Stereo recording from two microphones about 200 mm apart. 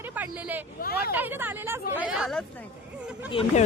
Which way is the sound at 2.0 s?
5° right (ahead or behind).